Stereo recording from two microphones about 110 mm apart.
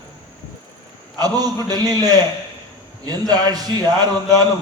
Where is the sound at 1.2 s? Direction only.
35° right (ahead or behind).